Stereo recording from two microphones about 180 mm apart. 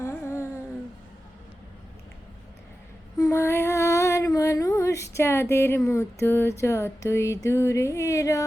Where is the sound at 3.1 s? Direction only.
15° left (ahead or behind).